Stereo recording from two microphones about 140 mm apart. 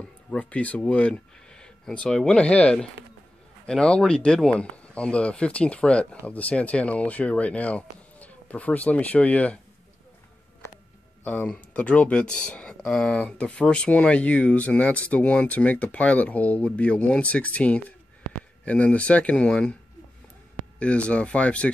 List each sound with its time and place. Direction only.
0.0 s speech: 10° left (ahead or behind)
11.2 s speech: 10° left (ahead or behind)
20.8 s speech: 10° left (ahead or behind)